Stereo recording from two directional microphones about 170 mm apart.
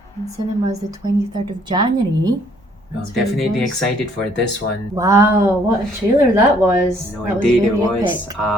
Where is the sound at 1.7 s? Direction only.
25° right (ahead or behind).